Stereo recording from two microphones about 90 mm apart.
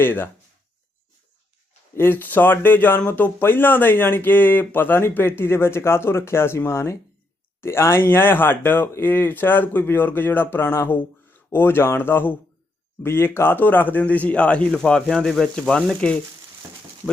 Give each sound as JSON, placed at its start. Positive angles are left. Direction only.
{"t": 0.0, "sound": "speech", "side_deg": 25}
{"t": 2.0, "sound": "a man's voice", "side_deg": 25}